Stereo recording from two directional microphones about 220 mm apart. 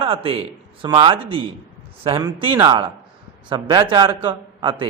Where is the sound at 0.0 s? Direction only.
25° right (ahead or behind).